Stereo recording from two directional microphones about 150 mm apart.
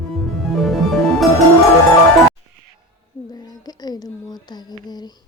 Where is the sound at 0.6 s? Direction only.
Centre (ahead or behind).